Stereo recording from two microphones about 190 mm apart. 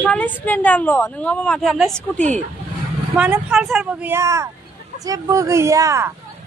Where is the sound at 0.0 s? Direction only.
10° left (ahead or behind).